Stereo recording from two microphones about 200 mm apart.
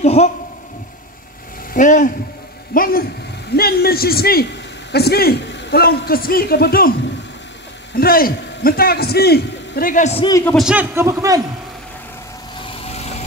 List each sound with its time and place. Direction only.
0.0 s a sound: 30° left (ahead or behind)
1.7 s a man's voice: 40° left (ahead or behind)
7.9 s a man's voice: 50° left (ahead or behind)
10.2 s a man's voice: 15° left (ahead or behind)
10.5 s a man's voice: 5° right (ahead or behind)